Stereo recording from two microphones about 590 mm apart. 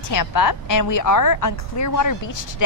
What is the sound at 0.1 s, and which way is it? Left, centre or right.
A woman's voice, left.